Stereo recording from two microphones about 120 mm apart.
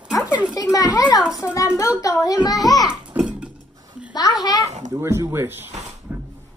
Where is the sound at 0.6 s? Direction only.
30° left (ahead or behind).